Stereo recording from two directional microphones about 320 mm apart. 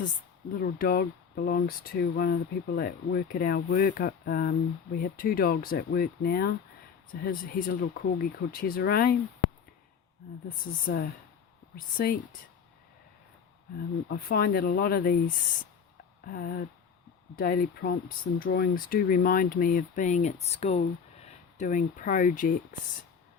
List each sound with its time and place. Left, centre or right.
0.5 s speech: left
10.8 s speech: left
14.1 s speech: left
16.2 s speech: left